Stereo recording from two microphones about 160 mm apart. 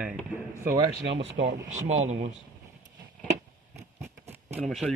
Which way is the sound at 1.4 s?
45° right (ahead or behind).